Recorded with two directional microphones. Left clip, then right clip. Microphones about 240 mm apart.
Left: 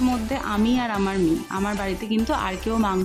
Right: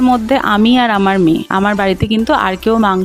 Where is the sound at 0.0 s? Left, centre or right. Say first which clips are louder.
Right 13 dB; right.